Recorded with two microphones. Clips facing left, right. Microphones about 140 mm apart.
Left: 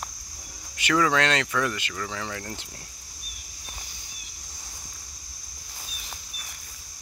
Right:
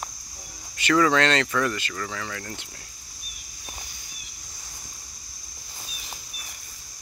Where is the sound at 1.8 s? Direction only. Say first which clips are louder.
Right 1 dB; 15° left (ahead or behind).